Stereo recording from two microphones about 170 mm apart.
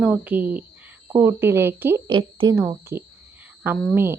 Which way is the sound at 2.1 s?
30° right (ahead or behind).